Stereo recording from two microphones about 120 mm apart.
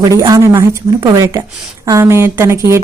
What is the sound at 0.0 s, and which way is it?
A woman's voice, 30° right (ahead or behind).